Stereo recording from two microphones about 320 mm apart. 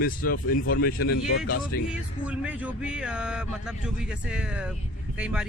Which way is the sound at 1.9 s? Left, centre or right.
Centre.